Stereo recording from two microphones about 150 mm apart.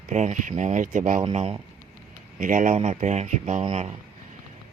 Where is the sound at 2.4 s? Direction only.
60° right (ahead or behind).